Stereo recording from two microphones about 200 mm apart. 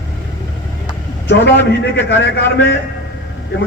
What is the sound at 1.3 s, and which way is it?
A man's voice, 60° left (ahead or behind).